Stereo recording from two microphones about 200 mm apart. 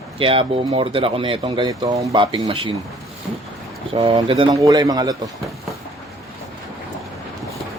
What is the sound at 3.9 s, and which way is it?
Speech, 25° right (ahead or behind).